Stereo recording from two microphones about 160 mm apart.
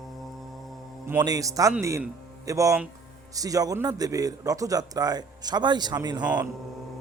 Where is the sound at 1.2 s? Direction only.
20° right (ahead or behind).